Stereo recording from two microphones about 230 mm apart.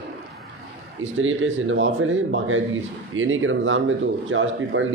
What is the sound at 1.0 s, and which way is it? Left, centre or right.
A man's voice, right.